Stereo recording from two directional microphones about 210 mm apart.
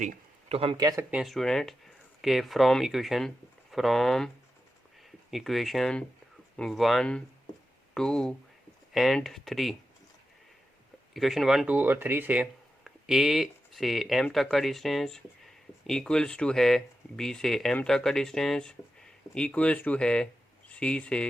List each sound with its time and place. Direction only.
0.0 s speech: 30° right (ahead or behind)
1.1 s speech: centre (ahead or behind)
5.3 s speech: centre (ahead or behind)
11.1 s speech: centre (ahead or behind)